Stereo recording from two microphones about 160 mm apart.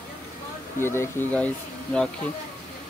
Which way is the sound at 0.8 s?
15° left (ahead or behind).